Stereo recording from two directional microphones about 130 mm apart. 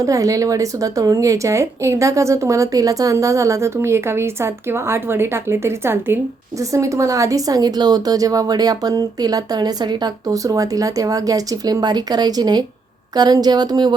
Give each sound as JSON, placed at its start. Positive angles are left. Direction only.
{"t": 0.0, "sound": "a woman's voice", "side_deg": -25}